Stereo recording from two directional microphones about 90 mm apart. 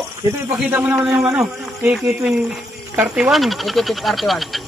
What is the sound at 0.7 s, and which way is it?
Speech, 20° right (ahead or behind).